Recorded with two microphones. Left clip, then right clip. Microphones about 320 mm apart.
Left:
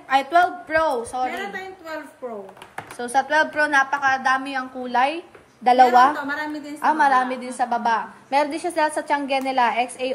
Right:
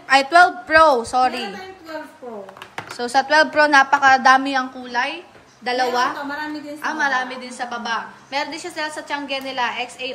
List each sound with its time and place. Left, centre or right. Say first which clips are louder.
0.1 s a woman's voice: right 5 dB; centre
3.0 s a woman's voice: right 4 dB; centre
4.8 s a woman's voice: left 2 dB; centre